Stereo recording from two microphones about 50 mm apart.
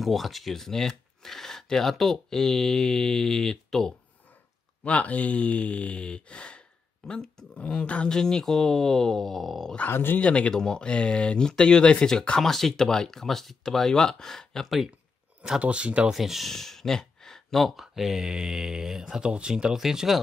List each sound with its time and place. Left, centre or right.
0.0 s speech: centre
4.8 s speech: left
8.1 s speech: centre
9.8 s speech: left
10.1 s speech: left
10.5 s speech: centre
15.6 s speech: right
16.1 s speech: centre
16.4 s speech: centre